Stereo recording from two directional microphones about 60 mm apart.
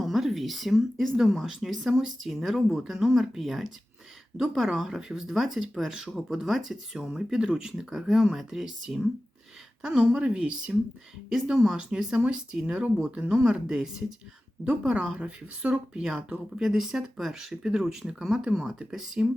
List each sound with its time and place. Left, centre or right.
0.0 s speech: centre
11.3 s speech: centre